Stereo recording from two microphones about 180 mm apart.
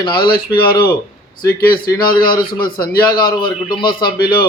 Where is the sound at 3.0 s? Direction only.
20° left (ahead or behind).